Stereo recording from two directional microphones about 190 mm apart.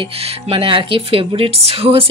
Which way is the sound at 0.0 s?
30° right (ahead or behind).